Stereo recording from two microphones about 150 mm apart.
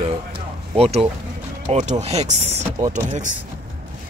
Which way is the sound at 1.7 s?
50° right (ahead or behind).